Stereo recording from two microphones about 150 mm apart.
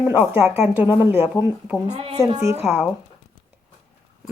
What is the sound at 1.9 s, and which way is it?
Speech, 40° right (ahead or behind).